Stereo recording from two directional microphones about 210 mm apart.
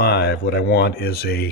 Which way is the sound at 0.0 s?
50° left (ahead or behind).